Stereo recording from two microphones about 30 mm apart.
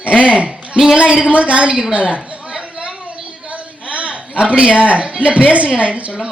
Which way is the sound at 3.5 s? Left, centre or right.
Right.